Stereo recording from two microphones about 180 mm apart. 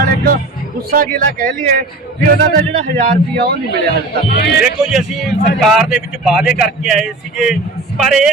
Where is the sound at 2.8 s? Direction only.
50° right (ahead or behind).